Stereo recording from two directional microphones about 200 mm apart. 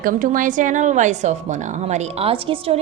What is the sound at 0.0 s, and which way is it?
A woman's voice, 40° right (ahead or behind).